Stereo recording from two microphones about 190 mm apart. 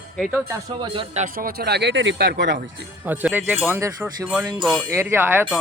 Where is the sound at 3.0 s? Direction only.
10° right (ahead or behind).